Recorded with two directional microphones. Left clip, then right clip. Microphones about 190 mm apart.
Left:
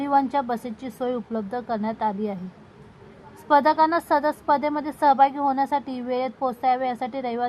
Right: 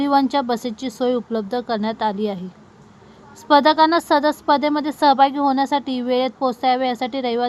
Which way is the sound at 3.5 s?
35° right (ahead or behind).